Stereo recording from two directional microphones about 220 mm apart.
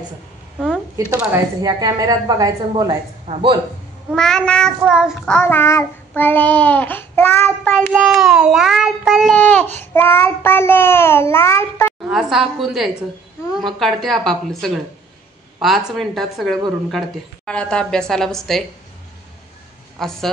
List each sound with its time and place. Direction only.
0.9 s a woman's voice: 15° right (ahead or behind)
4.1 s child singing: 5° left (ahead or behind)
12.1 s child singing: centre (ahead or behind)
20.0 s child singing: centre (ahead or behind)